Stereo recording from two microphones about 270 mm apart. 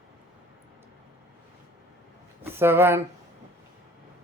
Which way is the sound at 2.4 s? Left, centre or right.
Centre.